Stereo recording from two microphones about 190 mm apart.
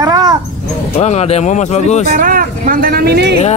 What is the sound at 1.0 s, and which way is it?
Speech, 35° left (ahead or behind).